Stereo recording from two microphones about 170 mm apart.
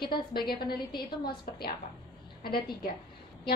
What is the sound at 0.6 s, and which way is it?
A woman's voice, 25° left (ahead or behind).